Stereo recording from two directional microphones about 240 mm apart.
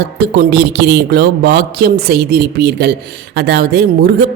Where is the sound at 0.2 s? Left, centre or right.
Right.